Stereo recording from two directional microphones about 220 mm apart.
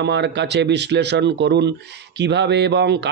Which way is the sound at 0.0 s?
50° right (ahead or behind).